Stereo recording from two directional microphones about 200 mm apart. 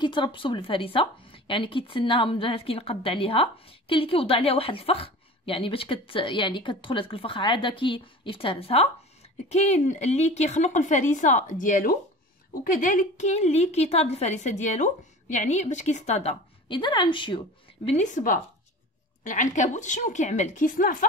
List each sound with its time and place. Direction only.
0.0 s a woman's voice: 25° left (ahead or behind)
17.9 s a woman's voice: 40° left (ahead or behind)